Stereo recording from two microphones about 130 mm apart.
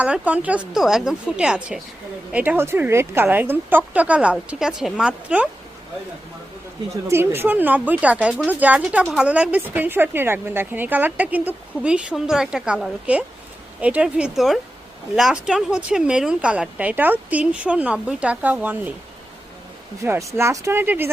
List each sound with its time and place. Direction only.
0.0 s a woman's voice: 10° right (ahead or behind)
7.1 s a woman's voice: 15° right (ahead or behind)
20.3 s speech: 20° right (ahead or behind)